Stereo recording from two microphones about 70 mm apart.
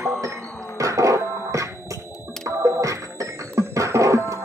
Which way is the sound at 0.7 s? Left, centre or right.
Right.